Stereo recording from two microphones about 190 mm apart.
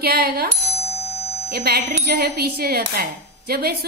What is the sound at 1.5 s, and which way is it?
Speech, 55° right (ahead or behind).